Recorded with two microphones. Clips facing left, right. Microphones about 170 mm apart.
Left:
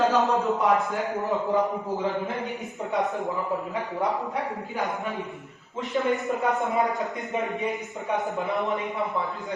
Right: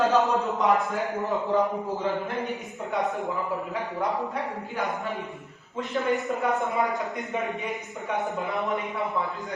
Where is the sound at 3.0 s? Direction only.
Centre (ahead or behind).